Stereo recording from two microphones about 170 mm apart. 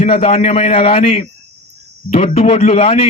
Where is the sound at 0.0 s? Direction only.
40° left (ahead or behind).